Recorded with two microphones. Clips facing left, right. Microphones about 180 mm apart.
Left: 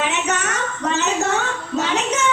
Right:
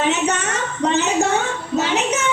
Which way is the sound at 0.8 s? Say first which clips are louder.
Right 4 dB; 20° right (ahead or behind).